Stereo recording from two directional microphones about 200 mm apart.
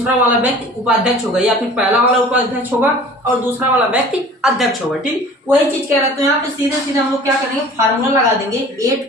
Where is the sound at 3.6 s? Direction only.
5° right (ahead or behind).